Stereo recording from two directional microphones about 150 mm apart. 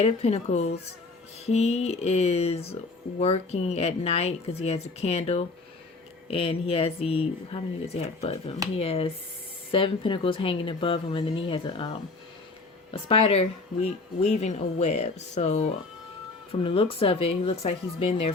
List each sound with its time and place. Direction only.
0.0 s speech: 45° left (ahead or behind)